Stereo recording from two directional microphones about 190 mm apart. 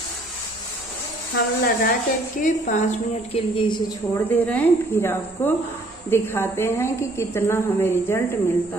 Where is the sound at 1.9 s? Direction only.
45° left (ahead or behind).